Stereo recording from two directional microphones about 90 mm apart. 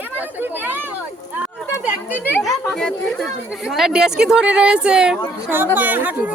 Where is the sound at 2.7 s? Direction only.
10° left (ahead or behind).